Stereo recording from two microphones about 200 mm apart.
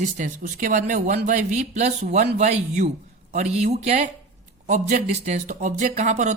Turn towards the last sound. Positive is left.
turn(degrees=-35)  # may be behind; listen again after turning